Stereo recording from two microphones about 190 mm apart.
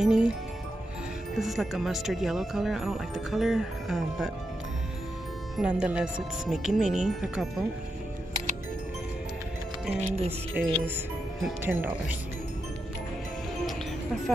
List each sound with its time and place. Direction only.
0.0 s music: 5° right (ahead or behind)
1.4 s speech: centre (ahead or behind)
5.6 s speech: 5° right (ahead or behind)
9.9 s speech: 35° right (ahead or behind)
10.6 s speech: 5° right (ahead or behind)